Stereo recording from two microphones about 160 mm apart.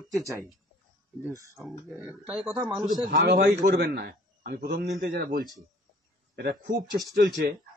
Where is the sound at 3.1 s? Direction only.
60° right (ahead or behind).